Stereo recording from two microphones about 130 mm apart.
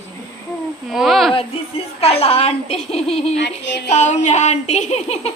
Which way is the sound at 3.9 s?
65° left (ahead or behind).